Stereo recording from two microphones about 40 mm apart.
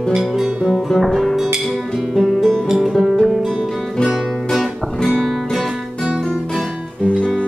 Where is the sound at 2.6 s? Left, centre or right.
Centre.